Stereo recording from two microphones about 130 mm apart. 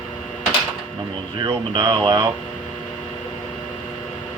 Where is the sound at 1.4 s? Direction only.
35° right (ahead or behind).